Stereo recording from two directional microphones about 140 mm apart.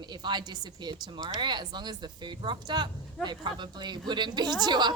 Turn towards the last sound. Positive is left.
turn(degrees=-30)  # may be behind; listen again after turning